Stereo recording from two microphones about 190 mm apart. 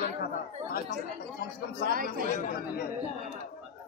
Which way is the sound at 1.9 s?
50° right (ahead or behind).